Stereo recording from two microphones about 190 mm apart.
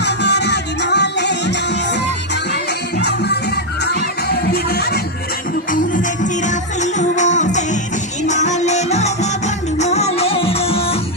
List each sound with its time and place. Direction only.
0.0 s music: 65° left (ahead or behind)
5.7 s music: 45° left (ahead or behind)